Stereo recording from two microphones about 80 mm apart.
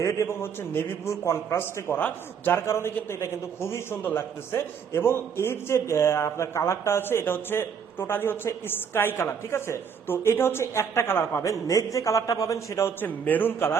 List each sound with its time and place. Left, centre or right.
0.0 s a man's voice: left
2.6 s a man's voice: left
11.4 s a man's voice: left
13.0 s a man's voice: left